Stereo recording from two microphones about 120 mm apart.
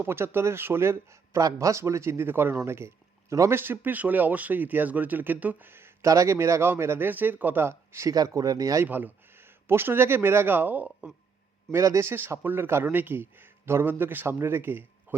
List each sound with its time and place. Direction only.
0.0 s speech: 20° right (ahead or behind)
11.7 s speech: 25° right (ahead or behind)